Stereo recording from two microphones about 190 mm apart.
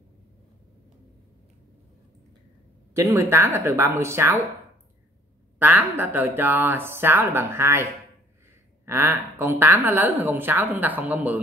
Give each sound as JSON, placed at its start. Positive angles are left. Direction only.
{"t": 2.9, "sound": "a woman's voice", "side_deg": -15}
{"t": 5.6, "sound": "a woman's voice", "side_deg": -10}